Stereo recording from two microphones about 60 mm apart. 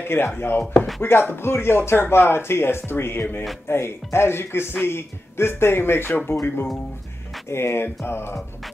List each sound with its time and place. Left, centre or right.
0.0 s speech: left